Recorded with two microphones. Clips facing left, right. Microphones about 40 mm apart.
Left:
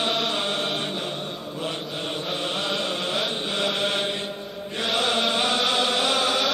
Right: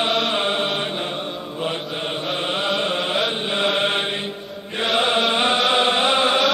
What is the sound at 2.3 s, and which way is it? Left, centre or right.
Mantra, right.